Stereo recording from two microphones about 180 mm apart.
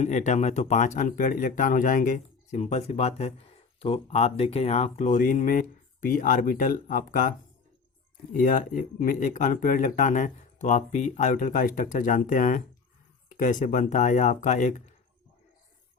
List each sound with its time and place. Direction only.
0.0 s speech: 40° left (ahead or behind)
8.4 s speech: 50° left (ahead or behind)